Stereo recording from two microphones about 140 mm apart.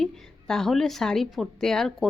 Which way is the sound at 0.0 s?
5° left (ahead or behind).